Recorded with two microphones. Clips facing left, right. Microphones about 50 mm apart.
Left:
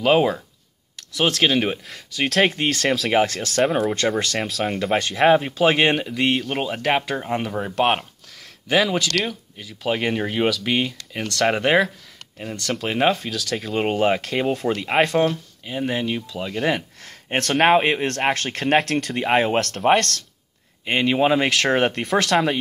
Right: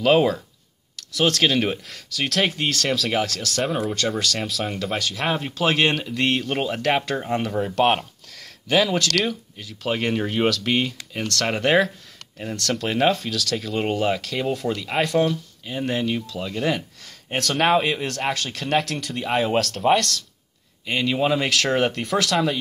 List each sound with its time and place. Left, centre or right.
0.0 s speech: centre
2.0 s speech: left
3.6 s speech: centre
3.9 s speech: left
4.4 s speech: centre
4.9 s speech: left
5.4 s speech: centre
6.7 s speech: centre
11.1 s speech: centre; by 15.3 s left
15.6 s speech: centre
17.0 s speech: left
18.9 s speech: left
20.8 s speech: left